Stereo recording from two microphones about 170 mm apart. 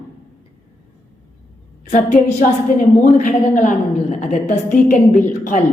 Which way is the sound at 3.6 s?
45° left (ahead or behind).